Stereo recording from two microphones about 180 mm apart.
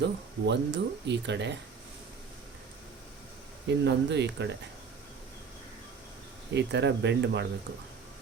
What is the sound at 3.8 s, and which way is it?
Speech, 75° right (ahead or behind).